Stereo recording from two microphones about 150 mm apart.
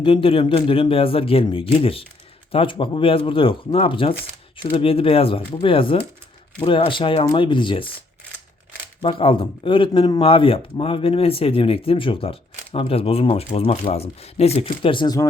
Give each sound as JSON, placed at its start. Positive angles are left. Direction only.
{"t": 0.0, "sound": "speech", "side_deg": 35}
{"t": 9.0, "sound": "speech", "side_deg": 40}